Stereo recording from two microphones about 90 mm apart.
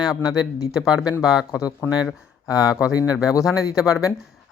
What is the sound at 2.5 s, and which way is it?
Speech, 45° left (ahead or behind).